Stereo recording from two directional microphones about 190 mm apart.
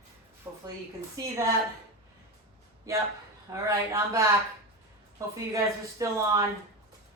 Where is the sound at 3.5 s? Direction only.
15° right (ahead or behind).